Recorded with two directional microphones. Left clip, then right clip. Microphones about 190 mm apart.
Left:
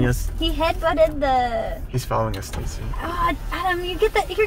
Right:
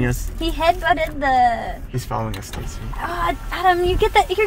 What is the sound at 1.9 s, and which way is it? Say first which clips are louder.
Speech: left 2 dB; 5° left (ahead or behind).